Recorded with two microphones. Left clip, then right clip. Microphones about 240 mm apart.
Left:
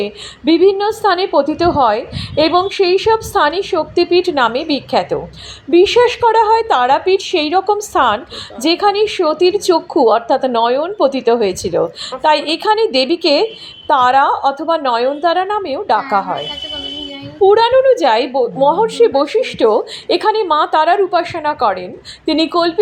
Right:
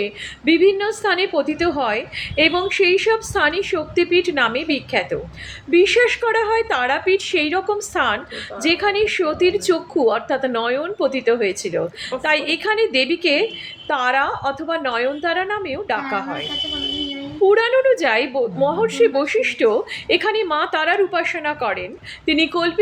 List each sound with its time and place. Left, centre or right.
0.0 s a woman's voice: centre
17.4 s a woman's voice: centre